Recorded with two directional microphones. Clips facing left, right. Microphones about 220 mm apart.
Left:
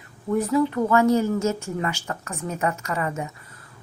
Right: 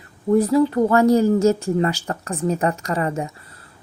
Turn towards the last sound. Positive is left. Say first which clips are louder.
# right 5 dB
turn(degrees=-35)  # may be behind; listen again after turning